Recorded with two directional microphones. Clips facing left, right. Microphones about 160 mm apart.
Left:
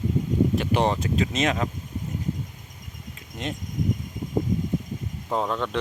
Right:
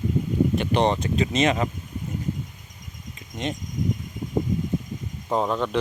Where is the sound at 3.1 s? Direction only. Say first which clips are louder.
Right 3 dB; centre (ahead or behind).